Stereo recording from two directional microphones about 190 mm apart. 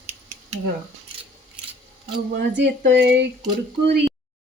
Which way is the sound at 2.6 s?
65° right (ahead or behind).